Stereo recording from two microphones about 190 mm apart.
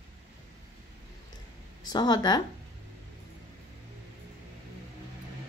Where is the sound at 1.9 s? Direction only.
20° left (ahead or behind).